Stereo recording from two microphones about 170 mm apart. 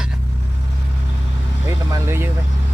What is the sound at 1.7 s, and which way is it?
Vehicle, 15° right (ahead or behind).